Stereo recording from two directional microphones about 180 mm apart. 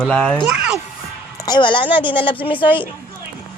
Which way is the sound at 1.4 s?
25° left (ahead or behind).